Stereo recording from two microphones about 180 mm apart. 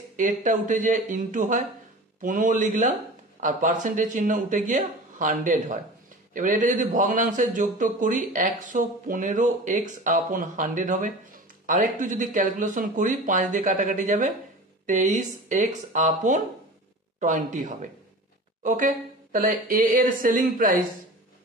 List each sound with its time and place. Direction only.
0.2 s a man's voice: 45° right (ahead or behind)